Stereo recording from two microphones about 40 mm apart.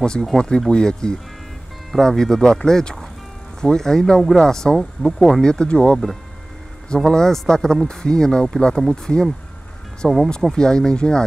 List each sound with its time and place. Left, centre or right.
0.0 s speech: left
4.2 s speech: centre
4.5 s speech: centre
4.7 s speech: centre
5.4 s speech: left
7.1 s speech: centre
10.0 s speech: centre
10.5 s speech: centre